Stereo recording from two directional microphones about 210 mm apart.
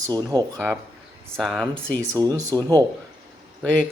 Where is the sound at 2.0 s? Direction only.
15° right (ahead or behind).